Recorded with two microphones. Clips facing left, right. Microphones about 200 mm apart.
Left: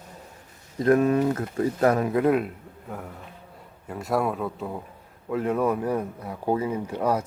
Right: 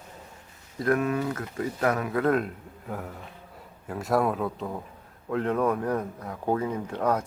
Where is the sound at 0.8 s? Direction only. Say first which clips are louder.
Left 5 dB; 25° left (ahead or behind).